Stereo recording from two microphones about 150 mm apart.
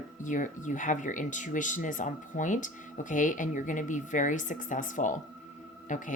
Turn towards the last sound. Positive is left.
turn(degrees=60)  # may be behind; listen again after turning